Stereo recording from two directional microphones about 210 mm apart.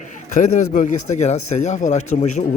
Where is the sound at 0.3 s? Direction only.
35° left (ahead or behind).